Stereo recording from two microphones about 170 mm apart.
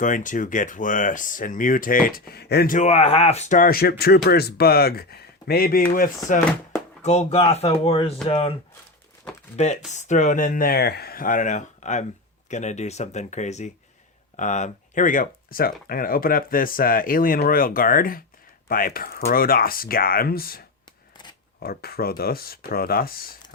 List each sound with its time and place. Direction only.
0.0 s speech: 50° left (ahead or behind)
7.0 s speech: 40° left (ahead or behind)
9.6 s speech: 45° left (ahead or behind); by 23.3 s 60° left (ahead or behind)